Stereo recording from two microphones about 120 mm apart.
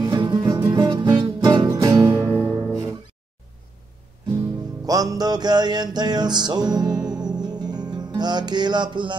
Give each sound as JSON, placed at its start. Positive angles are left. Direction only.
{"t": 0.0, "sound": "music", "side_deg": -35}
{"t": 2.1, "sound": "music", "side_deg": 15}
{"t": 4.8, "sound": "music", "side_deg": -30}